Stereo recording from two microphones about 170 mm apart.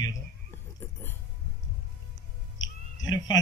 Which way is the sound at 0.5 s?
15° left (ahead or behind).